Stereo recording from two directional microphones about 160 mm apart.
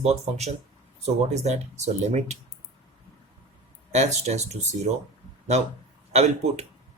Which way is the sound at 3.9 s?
45° right (ahead or behind).